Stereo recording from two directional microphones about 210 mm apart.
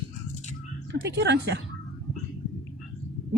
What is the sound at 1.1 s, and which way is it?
Speech, 55° right (ahead or behind).